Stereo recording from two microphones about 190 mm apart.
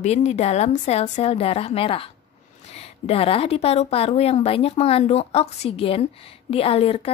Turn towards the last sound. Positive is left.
turn(degrees=30)  # may be behind; listen again after turning